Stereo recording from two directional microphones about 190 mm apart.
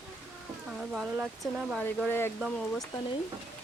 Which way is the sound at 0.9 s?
5° right (ahead or behind).